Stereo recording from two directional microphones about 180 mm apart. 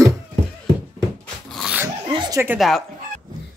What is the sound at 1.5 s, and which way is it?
Dog, 5° right (ahead or behind).